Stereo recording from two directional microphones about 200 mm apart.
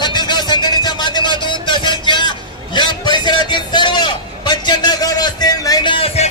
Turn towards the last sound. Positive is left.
turn(degrees=30)  # may be behind; listen again after turning